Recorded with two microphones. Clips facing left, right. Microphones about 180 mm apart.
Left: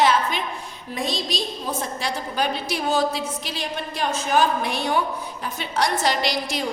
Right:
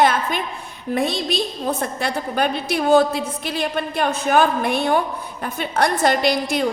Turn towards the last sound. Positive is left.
turn(degrees=-55)  # may be behind; listen again after turning